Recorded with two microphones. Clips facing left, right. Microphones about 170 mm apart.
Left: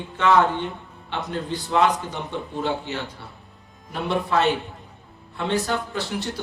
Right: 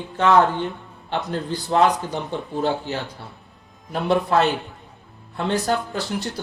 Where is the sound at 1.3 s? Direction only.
35° right (ahead or behind).